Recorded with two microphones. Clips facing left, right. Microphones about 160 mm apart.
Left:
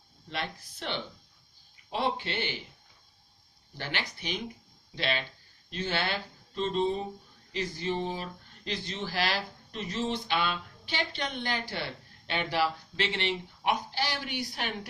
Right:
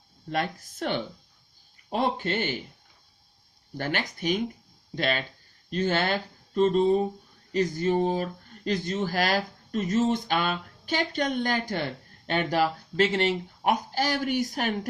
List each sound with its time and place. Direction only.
0.3 s speech: 45° right (ahead or behind)
3.8 s speech: 45° right (ahead or behind)